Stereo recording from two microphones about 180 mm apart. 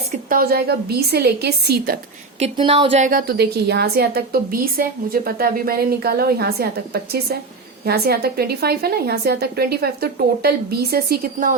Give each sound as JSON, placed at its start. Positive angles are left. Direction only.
{"t": 0.1, "sound": "a woman's voice", "side_deg": -55}
{"t": 2.4, "sound": "speech", "side_deg": -30}
{"t": 3.0, "sound": "a woman's voice", "side_deg": -50}